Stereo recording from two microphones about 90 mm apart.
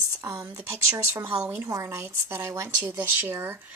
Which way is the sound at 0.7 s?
30° right (ahead or behind).